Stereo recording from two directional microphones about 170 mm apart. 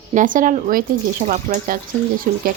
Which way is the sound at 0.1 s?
50° right (ahead or behind).